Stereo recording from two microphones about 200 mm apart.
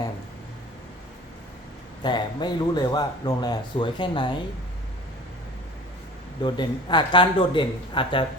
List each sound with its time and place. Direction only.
2.0 s speech: 20° left (ahead or behind)
6.4 s speech: 25° left (ahead or behind)